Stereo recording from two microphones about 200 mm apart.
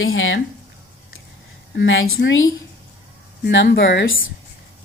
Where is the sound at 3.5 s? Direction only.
65° left (ahead or behind).